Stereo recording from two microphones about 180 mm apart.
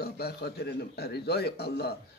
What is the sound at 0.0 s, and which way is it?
A man's voice, 60° left (ahead or behind).